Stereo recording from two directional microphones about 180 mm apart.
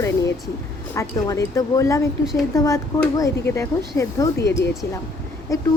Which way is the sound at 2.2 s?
Centre (ahead or behind).